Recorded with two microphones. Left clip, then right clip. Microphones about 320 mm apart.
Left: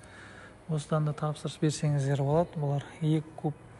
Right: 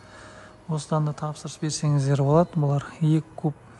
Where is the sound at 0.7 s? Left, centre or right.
Centre.